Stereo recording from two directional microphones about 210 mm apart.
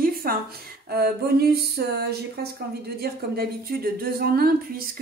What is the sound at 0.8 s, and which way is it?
Speech, 50° right (ahead or behind).